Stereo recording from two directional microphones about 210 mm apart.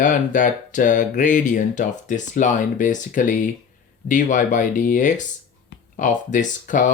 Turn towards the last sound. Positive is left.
turn(degrees=40)  # may be behind; listen again after turning